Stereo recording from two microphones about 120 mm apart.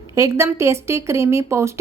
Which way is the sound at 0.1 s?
25° right (ahead or behind).